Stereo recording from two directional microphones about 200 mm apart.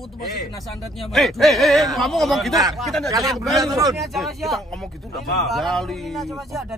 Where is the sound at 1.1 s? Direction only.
Centre (ahead or behind).